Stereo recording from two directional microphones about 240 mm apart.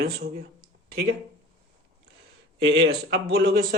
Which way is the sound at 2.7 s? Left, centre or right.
Right.